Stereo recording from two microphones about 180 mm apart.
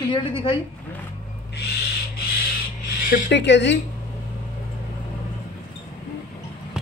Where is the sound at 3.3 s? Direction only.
75° left (ahead or behind).